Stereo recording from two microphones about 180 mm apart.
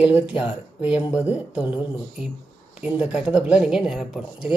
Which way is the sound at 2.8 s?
5° right (ahead or behind).